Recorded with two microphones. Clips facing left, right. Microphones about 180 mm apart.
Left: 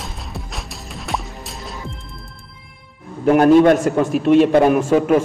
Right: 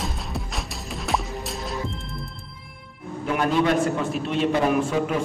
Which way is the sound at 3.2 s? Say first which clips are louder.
Left 11 dB; 50° left (ahead or behind).